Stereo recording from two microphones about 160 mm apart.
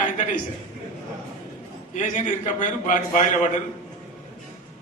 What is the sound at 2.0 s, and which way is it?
A man's voice, 50° left (ahead or behind).